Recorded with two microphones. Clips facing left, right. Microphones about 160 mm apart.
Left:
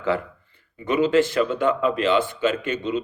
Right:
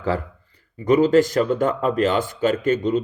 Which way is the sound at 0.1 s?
40° right (ahead or behind).